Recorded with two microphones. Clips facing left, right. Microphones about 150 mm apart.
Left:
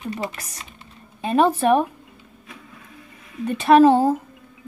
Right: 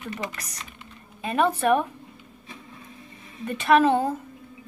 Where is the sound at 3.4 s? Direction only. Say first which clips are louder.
Left 6 dB; 30° left (ahead or behind).